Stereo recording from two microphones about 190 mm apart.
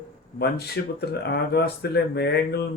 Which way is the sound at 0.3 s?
60° left (ahead or behind).